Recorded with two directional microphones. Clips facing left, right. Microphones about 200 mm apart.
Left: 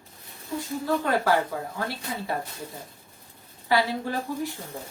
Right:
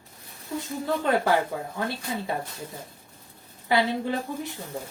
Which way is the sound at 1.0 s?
25° right (ahead or behind).